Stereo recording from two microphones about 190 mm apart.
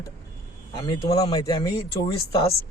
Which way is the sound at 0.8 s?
25° left (ahead or behind).